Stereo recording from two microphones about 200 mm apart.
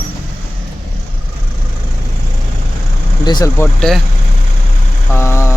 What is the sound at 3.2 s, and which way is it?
Speech, 20° left (ahead or behind).